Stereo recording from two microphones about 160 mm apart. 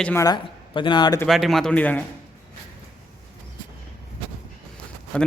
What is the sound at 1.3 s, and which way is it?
Speech, centre (ahead or behind).